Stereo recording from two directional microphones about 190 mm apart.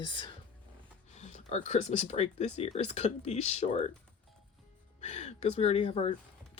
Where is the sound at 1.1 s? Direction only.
35° left (ahead or behind).